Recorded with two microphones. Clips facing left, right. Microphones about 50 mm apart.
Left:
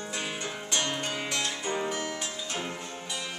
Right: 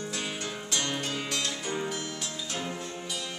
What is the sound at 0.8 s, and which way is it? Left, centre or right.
Music, left.